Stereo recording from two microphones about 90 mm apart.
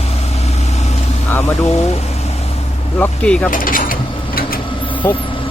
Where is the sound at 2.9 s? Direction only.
15° left (ahead or behind).